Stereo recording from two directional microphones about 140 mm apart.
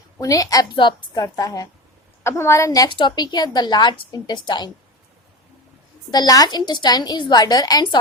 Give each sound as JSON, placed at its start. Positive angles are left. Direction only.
{"t": 0.2, "sound": "a woman's voice", "side_deg": 25}
{"t": 6.1, "sound": "a woman's voice", "side_deg": 30}